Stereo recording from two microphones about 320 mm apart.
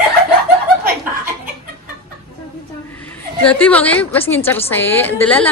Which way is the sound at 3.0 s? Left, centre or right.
Centre.